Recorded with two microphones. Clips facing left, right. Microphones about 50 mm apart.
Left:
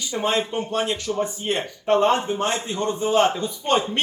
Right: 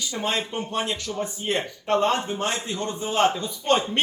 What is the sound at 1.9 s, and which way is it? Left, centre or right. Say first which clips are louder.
A man's voice: left 3 dB; centre.